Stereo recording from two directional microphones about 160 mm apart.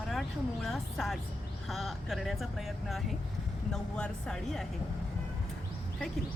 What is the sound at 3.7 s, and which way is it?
Speech, 5° left (ahead or behind).